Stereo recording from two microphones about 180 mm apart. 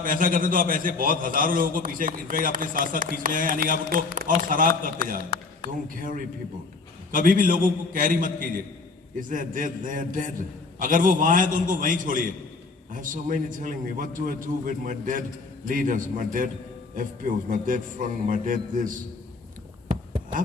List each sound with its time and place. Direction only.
0.0 s a man's voice: 50° right (ahead or behind)
6.0 s a man's voice: 50° right (ahead or behind)